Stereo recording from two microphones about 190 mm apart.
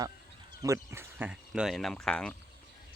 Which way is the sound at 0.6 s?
15° right (ahead or behind).